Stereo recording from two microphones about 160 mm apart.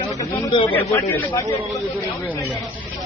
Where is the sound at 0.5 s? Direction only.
30° left (ahead or behind).